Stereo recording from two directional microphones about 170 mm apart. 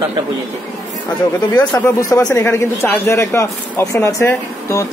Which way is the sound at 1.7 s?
15° left (ahead or behind).